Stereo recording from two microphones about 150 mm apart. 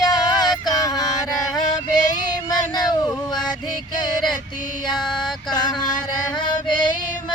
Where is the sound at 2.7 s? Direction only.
30° left (ahead or behind).